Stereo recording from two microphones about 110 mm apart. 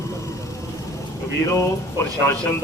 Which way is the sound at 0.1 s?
30° left (ahead or behind).